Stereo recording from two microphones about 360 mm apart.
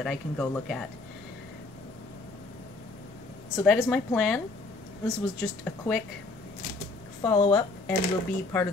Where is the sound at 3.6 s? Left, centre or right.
Centre.